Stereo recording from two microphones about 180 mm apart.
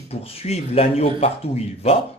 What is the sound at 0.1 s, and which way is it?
Speech, 35° left (ahead or behind).